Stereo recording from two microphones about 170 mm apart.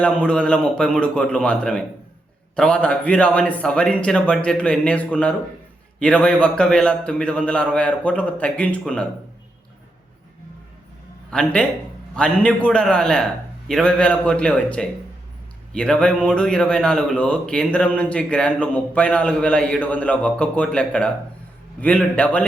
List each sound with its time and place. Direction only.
0.0 s a man's voice: 5° left (ahead or behind)
11.3 s a man's voice: 5° left (ahead or behind)